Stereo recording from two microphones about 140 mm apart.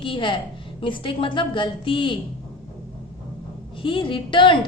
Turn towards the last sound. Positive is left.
turn(degrees=35)  # may be behind; listen again after turning